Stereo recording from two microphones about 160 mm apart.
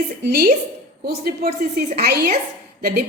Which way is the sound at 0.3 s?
75° right (ahead or behind).